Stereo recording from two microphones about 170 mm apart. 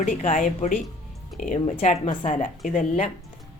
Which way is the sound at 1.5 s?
40° left (ahead or behind).